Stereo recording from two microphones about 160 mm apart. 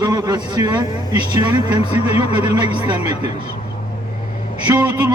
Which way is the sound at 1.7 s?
40° left (ahead or behind).